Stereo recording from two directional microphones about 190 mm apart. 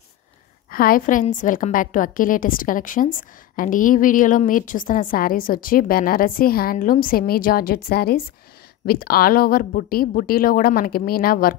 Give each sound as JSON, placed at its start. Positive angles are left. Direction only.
{"t": 0.7, "sound": "a woman's voice", "side_deg": 50}